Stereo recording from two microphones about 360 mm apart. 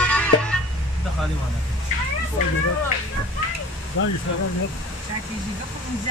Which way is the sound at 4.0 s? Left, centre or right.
Left.